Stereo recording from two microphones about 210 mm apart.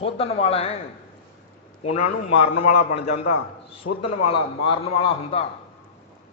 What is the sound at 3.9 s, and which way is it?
Speech, 90° left.